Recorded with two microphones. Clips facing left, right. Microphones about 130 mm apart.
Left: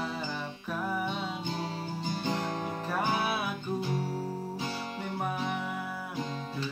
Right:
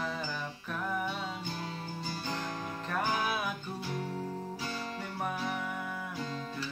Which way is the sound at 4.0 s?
30° left (ahead or behind).